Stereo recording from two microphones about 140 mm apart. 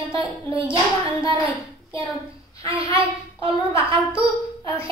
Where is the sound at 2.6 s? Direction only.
40° right (ahead or behind).